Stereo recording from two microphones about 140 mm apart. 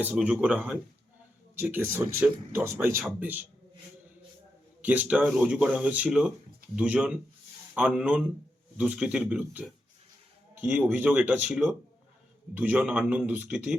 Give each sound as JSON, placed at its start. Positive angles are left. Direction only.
{"t": 0.0, "sound": "speech", "side_deg": -10}
{"t": 4.8, "sound": "speech", "side_deg": -10}